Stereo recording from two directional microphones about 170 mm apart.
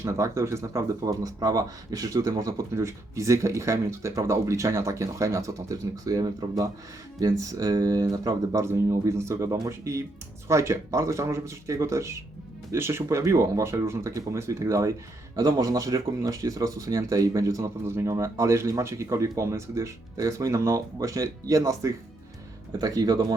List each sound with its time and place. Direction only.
0.0 s speech: 15° right (ahead or behind)